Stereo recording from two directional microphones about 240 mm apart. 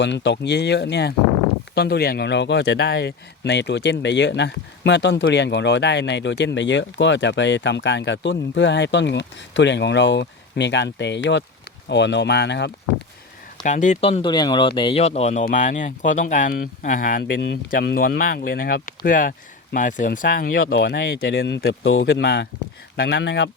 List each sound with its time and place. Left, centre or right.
0.0 s speech: left
13.7 s speech: left